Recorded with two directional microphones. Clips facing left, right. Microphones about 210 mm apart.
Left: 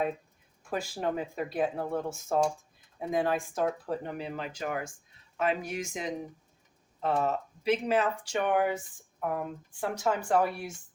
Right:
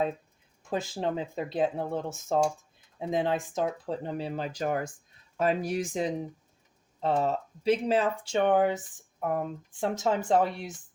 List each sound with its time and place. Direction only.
0.7 s speech: 25° right (ahead or behind)